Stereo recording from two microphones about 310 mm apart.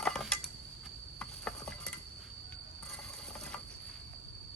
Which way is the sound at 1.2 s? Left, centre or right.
Centre.